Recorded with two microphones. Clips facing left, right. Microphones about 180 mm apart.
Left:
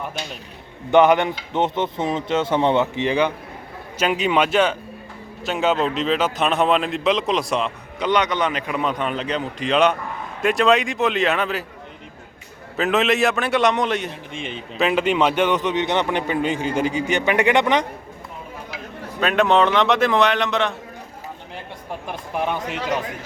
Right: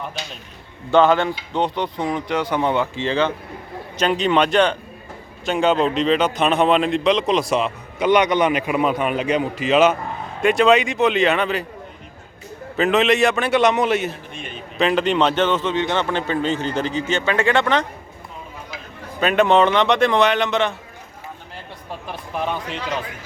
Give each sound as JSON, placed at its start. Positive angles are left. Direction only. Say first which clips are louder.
{"t": 0.9, "sound": "a man's voice", "louder": "left 1 dB", "side_deg": 20}
{"t": 12.7, "sound": "a man's voice", "louder": "right 2 dB", "side_deg": 0}
{"t": 14.1, "sound": "speech", "louder": "left 2 dB", "side_deg": 90}
{"t": 14.8, "sound": "a man's voice", "louder": "right 1 dB", "side_deg": 5}
{"t": 19.2, "sound": "a man's voice", "louder": "right 2 dB", "side_deg": 0}
{"t": 22.4, "sound": "a man's voice", "louder": "left 1 dB", "side_deg": 10}